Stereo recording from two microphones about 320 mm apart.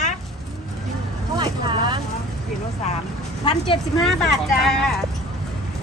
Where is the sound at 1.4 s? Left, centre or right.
Centre.